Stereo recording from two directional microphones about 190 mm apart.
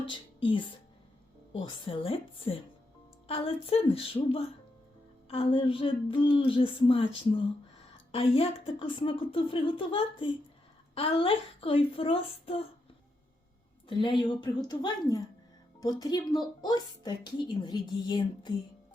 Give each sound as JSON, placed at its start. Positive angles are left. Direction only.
{"t": 0.0, "sound": "a woman's voice", "side_deg": 25}
{"t": 13.8, "sound": "a woman's voice", "side_deg": 25}